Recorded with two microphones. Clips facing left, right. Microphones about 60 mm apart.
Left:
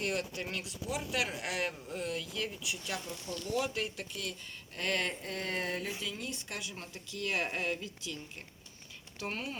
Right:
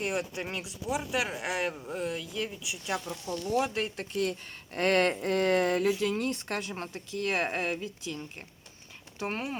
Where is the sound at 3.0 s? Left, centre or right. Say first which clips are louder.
Right 6 dB; right.